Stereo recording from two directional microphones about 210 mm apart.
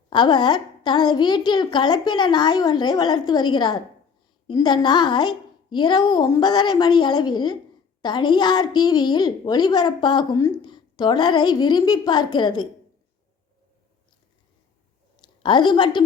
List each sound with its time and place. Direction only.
0.1 s a woman's voice: 20° left (ahead or behind)
15.1 s a woman's voice: 20° left (ahead or behind)